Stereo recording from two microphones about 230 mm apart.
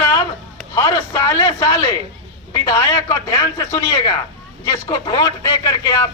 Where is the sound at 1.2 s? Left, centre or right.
Centre.